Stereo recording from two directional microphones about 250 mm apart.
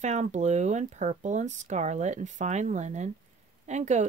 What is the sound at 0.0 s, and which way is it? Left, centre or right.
Speech, right.